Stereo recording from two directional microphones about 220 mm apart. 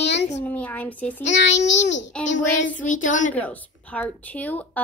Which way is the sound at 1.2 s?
55° left (ahead or behind).